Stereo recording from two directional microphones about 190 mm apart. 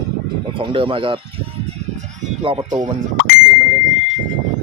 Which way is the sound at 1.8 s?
35° right (ahead or behind).